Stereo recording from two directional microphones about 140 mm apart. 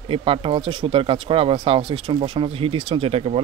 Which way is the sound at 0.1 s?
40° right (ahead or behind).